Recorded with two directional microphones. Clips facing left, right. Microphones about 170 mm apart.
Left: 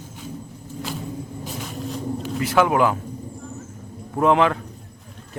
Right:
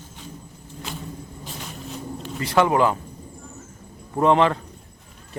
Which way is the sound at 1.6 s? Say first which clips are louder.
Left 5 dB; centre (ahead or behind).